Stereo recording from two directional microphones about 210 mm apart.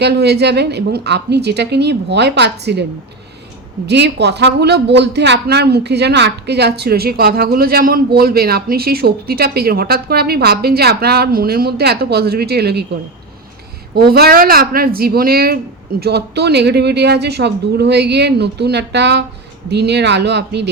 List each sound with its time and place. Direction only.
0.0 s speech: 50° right (ahead or behind)
3.8 s speech: 55° right (ahead or behind)
13.9 s speech: 50° right (ahead or behind)